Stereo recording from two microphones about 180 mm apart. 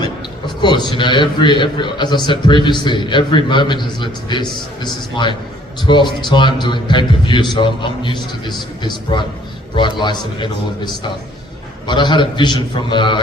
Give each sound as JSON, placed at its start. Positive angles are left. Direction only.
{"t": 0.4, "sound": "a man's voice", "side_deg": 25}
{"t": 11.9, "sound": "a man's voice", "side_deg": 25}